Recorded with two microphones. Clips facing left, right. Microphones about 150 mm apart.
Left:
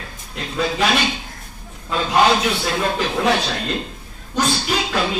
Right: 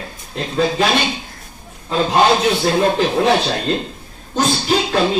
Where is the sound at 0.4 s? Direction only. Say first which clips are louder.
Right 4 dB; 35° right (ahead or behind).